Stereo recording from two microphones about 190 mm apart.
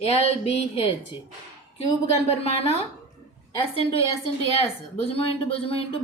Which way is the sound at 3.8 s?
30° left (ahead or behind).